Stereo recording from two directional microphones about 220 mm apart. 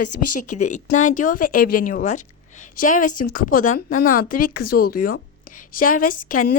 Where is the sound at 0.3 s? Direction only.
35° left (ahead or behind).